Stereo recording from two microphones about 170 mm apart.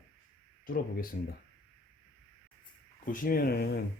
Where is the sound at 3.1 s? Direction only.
55° left (ahead or behind).